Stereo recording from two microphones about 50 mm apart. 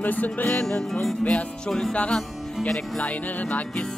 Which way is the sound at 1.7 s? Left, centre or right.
Centre.